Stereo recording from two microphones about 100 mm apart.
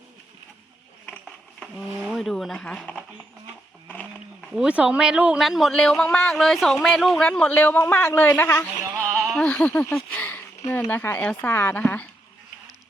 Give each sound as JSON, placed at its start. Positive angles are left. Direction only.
{"t": 1.0, "sound": "a sound", "side_deg": 10}
{"t": 2.0, "sound": "speech", "side_deg": 5}
{"t": 3.8, "sound": "roaring cats", "side_deg": 15}
{"t": 4.5, "sound": "speech", "side_deg": -10}
{"t": 5.5, "sound": "speech", "side_deg": 0}
{"t": 9.1, "sound": "a sound", "side_deg": 0}
{"t": 9.5, "sound": "speech", "side_deg": 15}
{"t": 10.2, "sound": "a sound", "side_deg": 20}
{"t": 11.4, "sound": "a woman's voice", "side_deg": 20}